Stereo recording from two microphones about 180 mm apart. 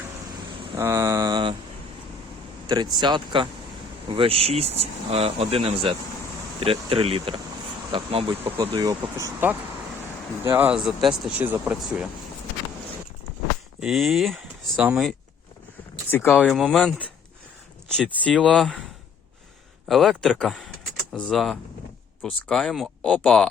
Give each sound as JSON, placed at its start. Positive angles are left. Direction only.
{"t": 0.8, "sound": "a sound", "side_deg": -15}
{"t": 2.6, "sound": "speech", "side_deg": -20}
{"t": 13.7, "sound": "speech", "side_deg": 0}
{"t": 16.0, "sound": "speech", "side_deg": 10}
{"t": 19.9, "sound": "speech", "side_deg": 0}